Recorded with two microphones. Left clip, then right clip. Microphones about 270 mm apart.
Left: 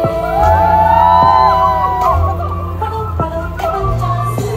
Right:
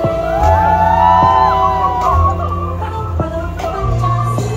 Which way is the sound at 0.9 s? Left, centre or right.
Left.